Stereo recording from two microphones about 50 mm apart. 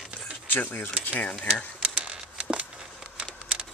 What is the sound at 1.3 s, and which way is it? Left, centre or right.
Speech, left.